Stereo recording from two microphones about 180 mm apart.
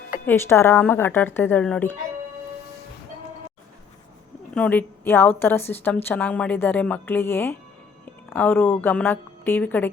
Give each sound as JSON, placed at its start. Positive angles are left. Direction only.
{"t": 0.3, "sound": "a woman's voice", "side_deg": 15}
{"t": 4.5, "sound": "a woman's voice", "side_deg": 10}